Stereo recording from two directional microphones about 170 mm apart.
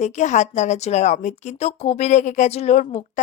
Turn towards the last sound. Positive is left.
turn(degrees=45)  # may be behind; listen again after turning